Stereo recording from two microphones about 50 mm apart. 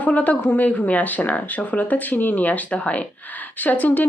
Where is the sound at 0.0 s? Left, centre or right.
Left.